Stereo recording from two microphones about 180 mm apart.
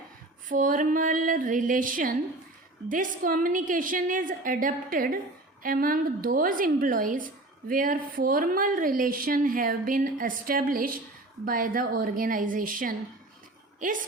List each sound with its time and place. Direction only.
0.4 s speech: 45° right (ahead or behind)